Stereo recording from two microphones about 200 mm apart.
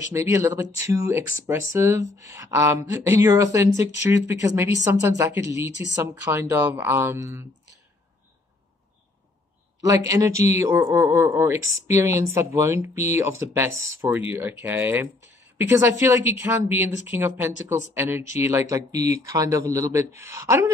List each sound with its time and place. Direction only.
0.1 s speech: 15° right (ahead or behind)
9.8 s speech: 15° right (ahead or behind)